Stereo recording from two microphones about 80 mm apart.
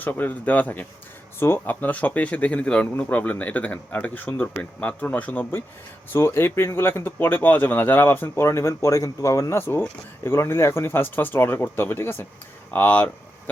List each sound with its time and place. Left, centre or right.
0.0 s speech: left